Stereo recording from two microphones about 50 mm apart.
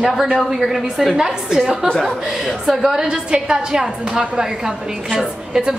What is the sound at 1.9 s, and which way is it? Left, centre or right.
Speech, centre.